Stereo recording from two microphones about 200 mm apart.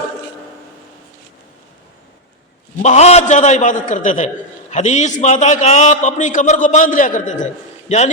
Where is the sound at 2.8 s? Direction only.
35° left (ahead or behind).